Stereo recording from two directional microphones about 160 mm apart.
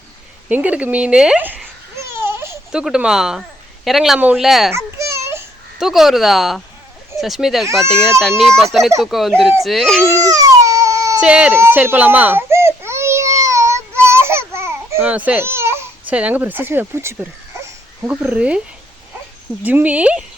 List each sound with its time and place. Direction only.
0.4 s babbling: 10° right (ahead or behind)
2.7 s speech: 5° right (ahead or behind)
4.7 s a sound: 15° right (ahead or behind)
5.8 s speech: centre (ahead or behind)
10.1 s baby cry: 20° right (ahead or behind)
11.2 s baby cry: 5° right (ahead or behind)
19.6 s speech: 10° right (ahead or behind)